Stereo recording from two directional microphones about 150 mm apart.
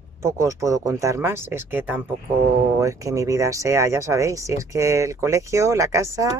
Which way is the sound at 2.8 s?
20° right (ahead or behind).